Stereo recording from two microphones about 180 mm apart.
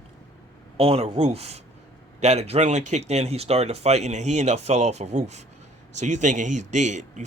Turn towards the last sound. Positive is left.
turn(degrees=-40)  # may be behind; listen again after turning